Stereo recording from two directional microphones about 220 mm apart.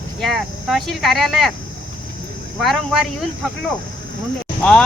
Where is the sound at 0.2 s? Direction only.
Centre (ahead or behind).